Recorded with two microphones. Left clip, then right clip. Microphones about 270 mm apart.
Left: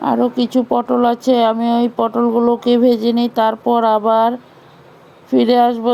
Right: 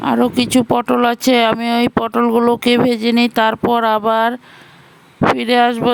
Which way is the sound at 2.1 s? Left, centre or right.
Right.